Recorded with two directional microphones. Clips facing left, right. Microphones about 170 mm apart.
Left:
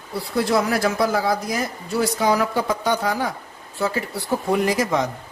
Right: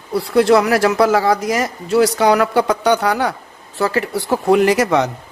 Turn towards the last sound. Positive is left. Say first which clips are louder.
# right 6 dB
turn(degrees=-75)  # may be behind; listen again after turning